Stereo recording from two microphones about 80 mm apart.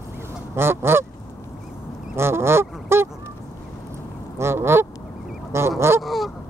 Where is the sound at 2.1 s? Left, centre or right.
Right.